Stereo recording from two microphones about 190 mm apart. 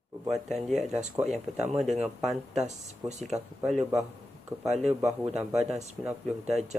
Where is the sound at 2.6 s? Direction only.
35° right (ahead or behind).